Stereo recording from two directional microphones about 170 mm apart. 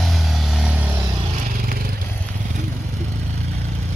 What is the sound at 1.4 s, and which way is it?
Vehicle, 60° right (ahead or behind).